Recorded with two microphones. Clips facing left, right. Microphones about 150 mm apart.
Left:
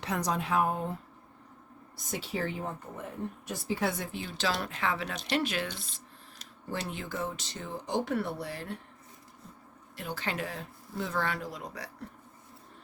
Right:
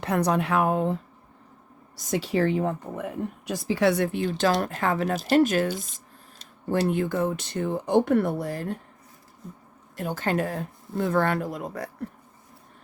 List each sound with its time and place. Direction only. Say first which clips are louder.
0.0 s speech: right 8 dB; 60° right (ahead or behind); by 0.9 s 85° right
2.0 s speech: right 10 dB; 90° right; by 5.8 s 45° right (ahead or behind)
6.7 s speech: right 12 dB; 55° right (ahead or behind)
10.0 s speech: right 9 dB; 45° right (ahead or behind)